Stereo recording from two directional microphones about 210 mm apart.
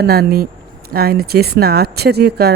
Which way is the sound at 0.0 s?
50° right (ahead or behind).